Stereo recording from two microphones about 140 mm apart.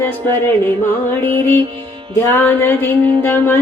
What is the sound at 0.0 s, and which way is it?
Music, 15° left (ahead or behind).